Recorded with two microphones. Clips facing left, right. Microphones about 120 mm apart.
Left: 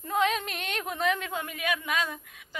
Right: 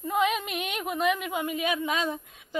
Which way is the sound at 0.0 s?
5° right (ahead or behind).